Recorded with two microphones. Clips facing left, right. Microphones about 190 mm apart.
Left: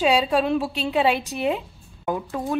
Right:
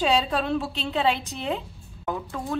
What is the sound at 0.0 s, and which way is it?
A woman's voice, 5° left (ahead or behind).